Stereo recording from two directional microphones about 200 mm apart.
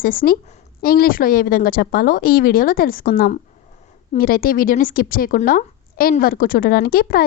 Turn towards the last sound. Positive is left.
turn(degrees=50)  # may be behind; listen again after turning